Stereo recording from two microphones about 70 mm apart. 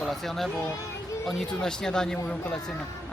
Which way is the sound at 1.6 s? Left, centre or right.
Centre.